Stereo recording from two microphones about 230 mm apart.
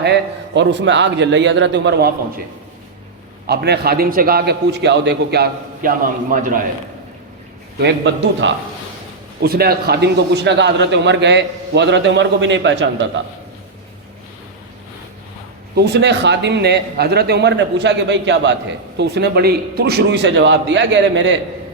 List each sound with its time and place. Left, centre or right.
0.0 s a man's voice: right
3.4 s a man's voice: right
7.8 s a man's voice: right
15.7 s a man's voice: right